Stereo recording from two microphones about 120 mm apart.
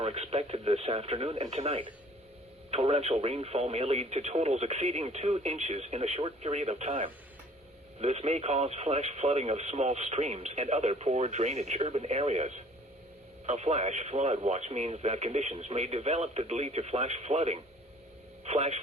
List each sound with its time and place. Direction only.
0.0 s speech: 60° right (ahead or behind)